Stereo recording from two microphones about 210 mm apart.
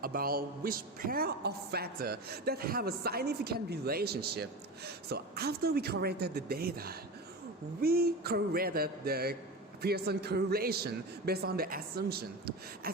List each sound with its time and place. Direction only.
0.0 s a woman's voice: 45° right (ahead or behind)